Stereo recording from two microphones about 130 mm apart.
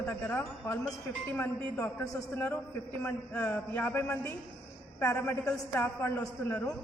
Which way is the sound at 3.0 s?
15° left (ahead or behind).